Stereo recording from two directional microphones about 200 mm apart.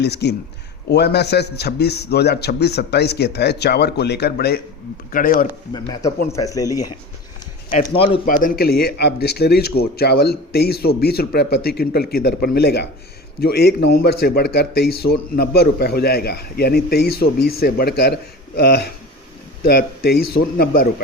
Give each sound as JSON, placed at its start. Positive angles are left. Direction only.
{"t": 0.0, "sound": "a man's voice", "side_deg": 55}
{"t": 5.7, "sound": "a man's voice", "side_deg": 20}
{"t": 8.3, "sound": "a man's voice", "side_deg": 45}